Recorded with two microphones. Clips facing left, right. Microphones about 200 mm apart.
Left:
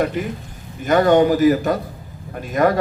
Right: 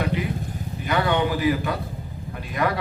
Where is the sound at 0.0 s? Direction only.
45° left (ahead or behind).